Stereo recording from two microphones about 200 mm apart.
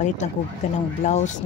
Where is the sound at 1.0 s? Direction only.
35° left (ahead or behind).